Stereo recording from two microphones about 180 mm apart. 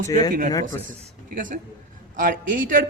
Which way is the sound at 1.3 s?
50° right (ahead or behind).